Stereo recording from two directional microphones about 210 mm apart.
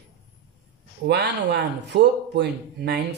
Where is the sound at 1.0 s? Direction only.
55° right (ahead or behind).